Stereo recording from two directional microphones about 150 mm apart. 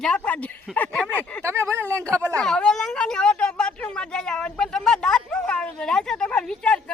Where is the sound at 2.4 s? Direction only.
5° left (ahead or behind).